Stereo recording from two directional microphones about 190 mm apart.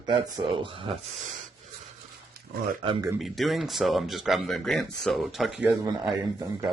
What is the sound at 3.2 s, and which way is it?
Speech, centre (ahead or behind).